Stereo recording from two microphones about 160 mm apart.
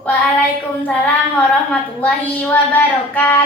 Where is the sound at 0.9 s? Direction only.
10° left (ahead or behind).